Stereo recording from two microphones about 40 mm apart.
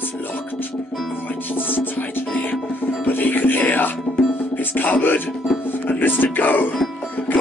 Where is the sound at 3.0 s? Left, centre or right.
Left.